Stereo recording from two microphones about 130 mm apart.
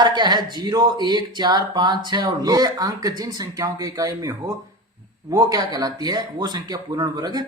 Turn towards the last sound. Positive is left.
turn(degrees=-30)  # may be behind; listen again after turning